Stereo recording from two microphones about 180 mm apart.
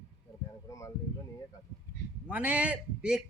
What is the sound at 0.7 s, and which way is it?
Speech, 15° left (ahead or behind).